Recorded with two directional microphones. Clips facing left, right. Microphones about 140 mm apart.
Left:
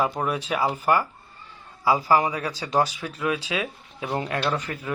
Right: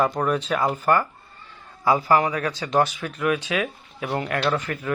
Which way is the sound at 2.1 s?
15° left (ahead or behind).